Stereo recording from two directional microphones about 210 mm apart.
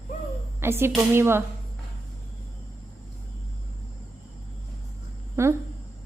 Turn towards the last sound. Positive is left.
turn(degrees=-10)  # may be behind; listen again after turning